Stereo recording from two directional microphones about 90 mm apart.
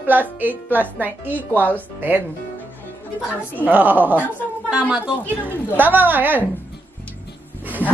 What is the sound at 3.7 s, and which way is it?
Speech, 20° right (ahead or behind).